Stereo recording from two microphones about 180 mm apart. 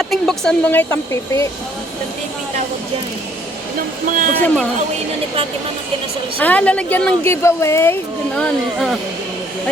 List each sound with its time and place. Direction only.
0.0 s a woman's voice: centre (ahead or behind)
3.8 s speech: 50° right (ahead or behind)
4.4 s a woman's voice: 10° left (ahead or behind)
6.4 s a woman's voice: 10° left (ahead or behind)
8.4 s speech: 5° left (ahead or behind)